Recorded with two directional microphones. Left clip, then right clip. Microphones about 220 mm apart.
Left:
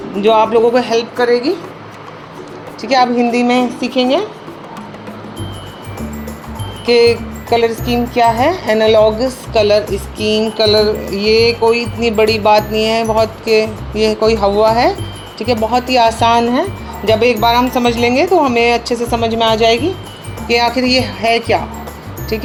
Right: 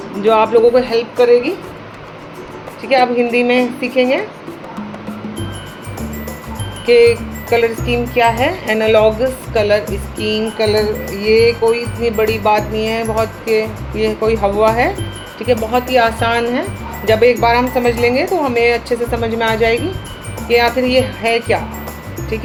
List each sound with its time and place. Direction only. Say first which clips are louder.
0.2 s music: left 1 dB; 20° left (ahead or behind)
2.9 s music: even; 25° left (ahead or behind)
6.8 s music: right 1 dB; 25° left (ahead or behind)